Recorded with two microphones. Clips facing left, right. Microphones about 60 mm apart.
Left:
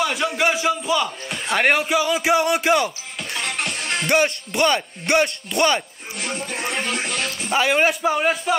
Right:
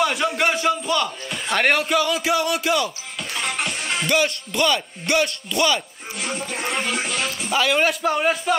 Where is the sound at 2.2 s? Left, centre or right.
Left.